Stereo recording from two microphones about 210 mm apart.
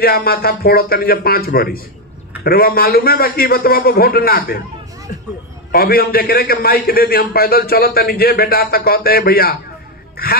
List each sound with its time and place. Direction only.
0.0 s a man's voice: 45° left (ahead or behind)
5.7 s a man's voice: 45° left (ahead or behind)